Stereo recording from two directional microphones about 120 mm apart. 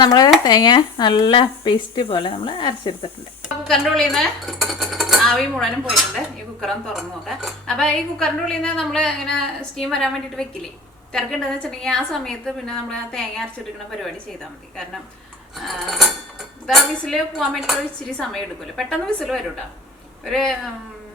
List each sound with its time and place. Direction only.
0.0 s speech: 35° left (ahead or behind)
3.4 s speech: centre (ahead or behind)
15.5 s speech: centre (ahead or behind)